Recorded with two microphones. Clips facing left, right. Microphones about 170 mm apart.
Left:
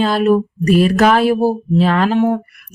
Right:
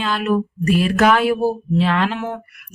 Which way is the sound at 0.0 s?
35° left (ahead or behind).